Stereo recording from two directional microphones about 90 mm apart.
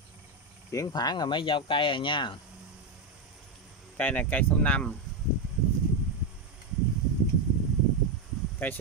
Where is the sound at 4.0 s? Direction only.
20° left (ahead or behind).